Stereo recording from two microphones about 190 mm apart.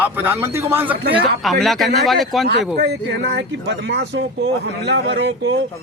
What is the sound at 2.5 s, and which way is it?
Speech, 60° right (ahead or behind).